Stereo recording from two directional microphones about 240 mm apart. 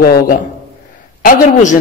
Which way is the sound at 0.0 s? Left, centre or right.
Left.